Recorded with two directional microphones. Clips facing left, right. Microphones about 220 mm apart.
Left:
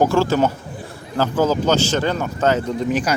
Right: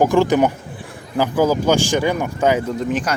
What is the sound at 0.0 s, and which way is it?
Speech, 15° right (ahead or behind).